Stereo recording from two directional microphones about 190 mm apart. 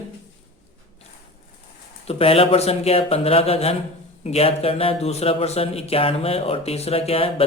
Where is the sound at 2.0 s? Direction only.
30° left (ahead or behind).